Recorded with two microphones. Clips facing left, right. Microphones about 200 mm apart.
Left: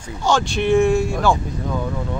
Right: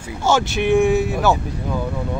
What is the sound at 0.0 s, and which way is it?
Speech, 5° right (ahead or behind).